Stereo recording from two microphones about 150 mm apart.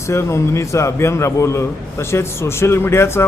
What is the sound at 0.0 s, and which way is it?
A man's voice, 20° left (ahead or behind).